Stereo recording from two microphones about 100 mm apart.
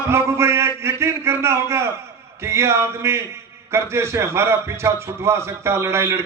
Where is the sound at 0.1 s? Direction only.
25° right (ahead or behind).